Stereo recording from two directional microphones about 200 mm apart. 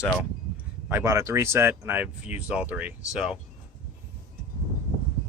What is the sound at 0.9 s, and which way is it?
Speech, 15° right (ahead or behind).